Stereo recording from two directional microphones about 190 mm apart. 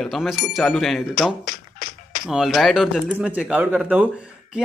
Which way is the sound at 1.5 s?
45° left (ahead or behind).